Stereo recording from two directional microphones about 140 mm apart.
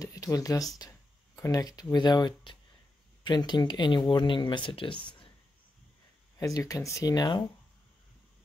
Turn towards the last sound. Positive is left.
turn(degrees=30)  # may be behind; listen again after turning